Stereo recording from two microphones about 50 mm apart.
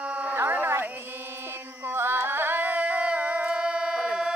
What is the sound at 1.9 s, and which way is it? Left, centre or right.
Music, right.